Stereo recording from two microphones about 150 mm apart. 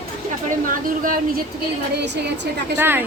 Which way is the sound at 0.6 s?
65° right (ahead or behind).